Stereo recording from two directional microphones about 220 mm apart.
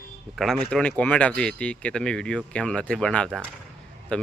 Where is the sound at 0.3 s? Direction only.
Centre (ahead or behind).